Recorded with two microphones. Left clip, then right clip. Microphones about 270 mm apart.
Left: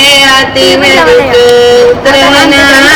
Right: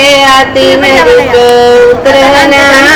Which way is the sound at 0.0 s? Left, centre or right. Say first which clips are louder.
Even; centre.